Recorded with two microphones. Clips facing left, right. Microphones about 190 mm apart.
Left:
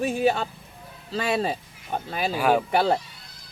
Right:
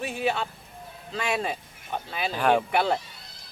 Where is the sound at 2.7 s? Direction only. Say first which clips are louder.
Left 3 dB; 35° left (ahead or behind).